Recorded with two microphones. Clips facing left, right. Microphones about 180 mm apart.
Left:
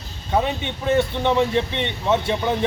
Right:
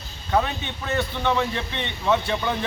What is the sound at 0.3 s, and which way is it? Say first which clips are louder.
Speech: left 2 dB; 20° left (ahead or behind).